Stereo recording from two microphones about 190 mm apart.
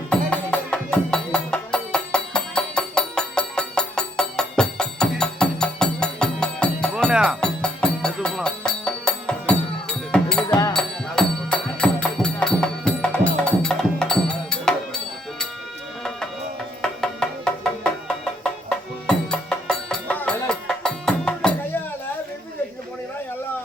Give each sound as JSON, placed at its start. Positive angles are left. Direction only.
{"t": 0.1, "sound": "music", "side_deg": 5}
{"t": 10.5, "sound": "music", "side_deg": 20}
{"t": 10.8, "sound": "music", "side_deg": 5}
{"t": 16.8, "sound": "music", "side_deg": 5}
{"t": 19.0, "sound": "music", "side_deg": 5}